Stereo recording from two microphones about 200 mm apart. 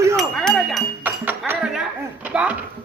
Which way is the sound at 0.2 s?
Centre (ahead or behind).